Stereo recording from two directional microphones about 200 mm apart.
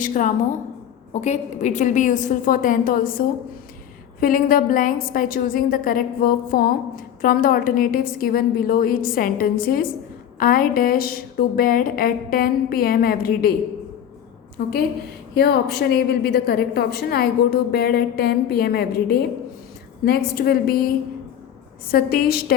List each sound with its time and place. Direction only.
0.0 s a woman's voice: 40° left (ahead or behind)
15.4 s a woman's voice: 50° left (ahead or behind)